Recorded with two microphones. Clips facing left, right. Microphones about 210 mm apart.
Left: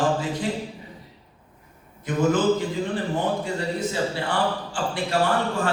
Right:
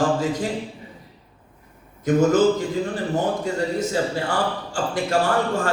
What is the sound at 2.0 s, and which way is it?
Speech, 45° right (ahead or behind).